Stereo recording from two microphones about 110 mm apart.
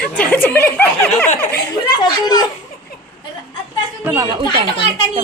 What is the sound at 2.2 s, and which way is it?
Speech, 35° left (ahead or behind).